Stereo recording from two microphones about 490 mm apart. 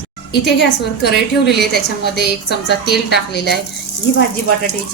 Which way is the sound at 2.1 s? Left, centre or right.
Centre.